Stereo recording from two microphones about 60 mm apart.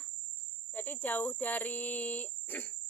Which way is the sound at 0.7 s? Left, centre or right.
Left.